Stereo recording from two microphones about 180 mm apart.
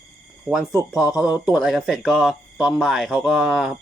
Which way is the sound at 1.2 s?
5° right (ahead or behind).